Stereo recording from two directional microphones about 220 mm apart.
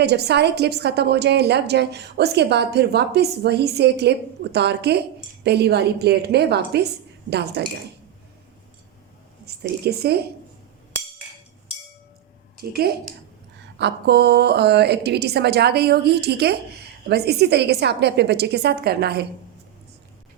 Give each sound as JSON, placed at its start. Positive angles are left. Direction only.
{"t": 0.0, "sound": "a woman's voice", "side_deg": -50}
{"t": 9.5, "sound": "a sound", "side_deg": -45}
{"t": 9.8, "sound": "a woman's voice", "side_deg": -45}
{"t": 12.7, "sound": "a woman's voice", "side_deg": -45}